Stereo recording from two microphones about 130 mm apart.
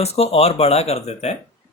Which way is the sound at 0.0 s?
50° left (ahead or behind).